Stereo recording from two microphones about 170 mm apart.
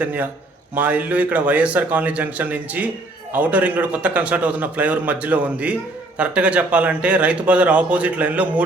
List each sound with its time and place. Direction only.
0.0 s a man's voice: 10° right (ahead or behind)